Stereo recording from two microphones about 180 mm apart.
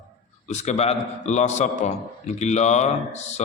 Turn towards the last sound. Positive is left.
turn(degrees=40)  # may be behind; listen again after turning